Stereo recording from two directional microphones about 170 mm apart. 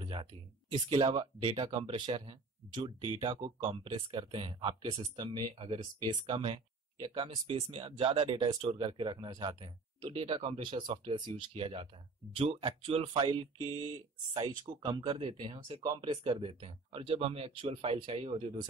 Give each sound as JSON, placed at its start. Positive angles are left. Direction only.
{"t": 0.0, "sound": "speech", "side_deg": -30}